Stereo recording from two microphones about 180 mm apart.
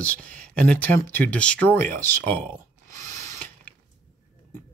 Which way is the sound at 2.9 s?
10° left (ahead or behind).